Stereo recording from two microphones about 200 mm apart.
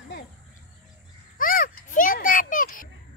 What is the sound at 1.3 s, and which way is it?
Children playing, 45° left (ahead or behind).